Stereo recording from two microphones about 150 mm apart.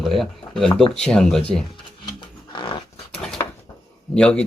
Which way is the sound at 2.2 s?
35° left (ahead or behind).